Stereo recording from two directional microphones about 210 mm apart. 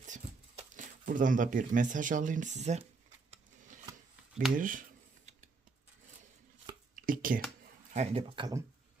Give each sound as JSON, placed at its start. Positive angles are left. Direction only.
{"t": 0.0, "sound": "speech", "side_deg": -35}
{"t": 4.5, "sound": "speech", "side_deg": -40}
{"t": 6.9, "sound": "a sound", "side_deg": -40}
{"t": 7.9, "sound": "speech", "side_deg": -25}